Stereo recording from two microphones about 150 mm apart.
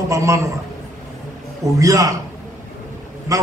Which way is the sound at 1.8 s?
20° right (ahead or behind).